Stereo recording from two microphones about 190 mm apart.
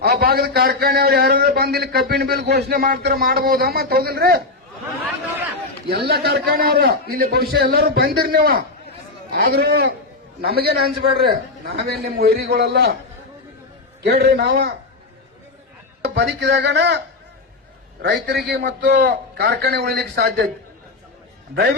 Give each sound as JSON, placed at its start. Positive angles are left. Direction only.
{"t": 0.0, "sound": "a man's voice", "side_deg": -55}
{"t": 5.9, "sound": "a man's voice", "side_deg": -60}
{"t": 14.0, "sound": "a man's voice", "side_deg": -60}
{"t": 16.0, "sound": "a man's voice", "side_deg": -60}
{"t": 18.0, "sound": "a man's voice", "side_deg": -60}
{"t": 21.5, "sound": "a man's voice", "side_deg": -55}